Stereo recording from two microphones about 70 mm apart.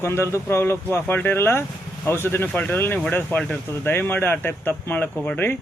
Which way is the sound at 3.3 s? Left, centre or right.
Centre.